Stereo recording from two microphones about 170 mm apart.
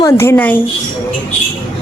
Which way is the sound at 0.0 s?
15° left (ahead or behind).